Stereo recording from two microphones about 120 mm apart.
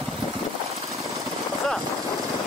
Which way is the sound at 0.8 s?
25° right (ahead or behind).